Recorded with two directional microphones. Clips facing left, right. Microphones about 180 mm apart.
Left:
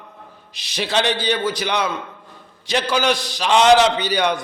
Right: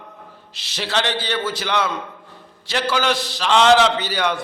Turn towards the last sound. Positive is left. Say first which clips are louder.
# left 2 dB
turn(degrees=15)  # may be behind; listen again after turning